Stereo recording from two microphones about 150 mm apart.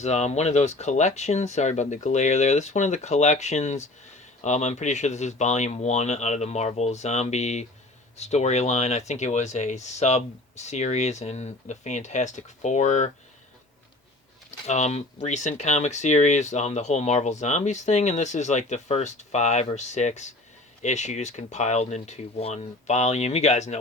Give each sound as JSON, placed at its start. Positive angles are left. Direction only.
{"t": 0.0, "sound": "speech", "side_deg": 50}
{"t": 14.7, "sound": "speech", "side_deg": 50}